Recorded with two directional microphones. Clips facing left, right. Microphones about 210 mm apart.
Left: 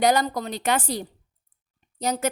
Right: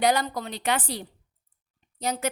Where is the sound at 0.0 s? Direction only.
45° left (ahead or behind).